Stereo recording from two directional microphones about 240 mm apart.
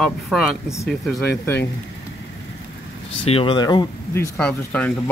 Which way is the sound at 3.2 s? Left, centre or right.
Left.